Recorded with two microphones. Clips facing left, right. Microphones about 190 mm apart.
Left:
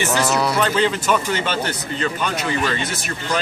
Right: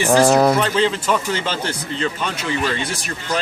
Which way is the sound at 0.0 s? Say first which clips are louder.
Right 6 dB; 30° right (ahead or behind).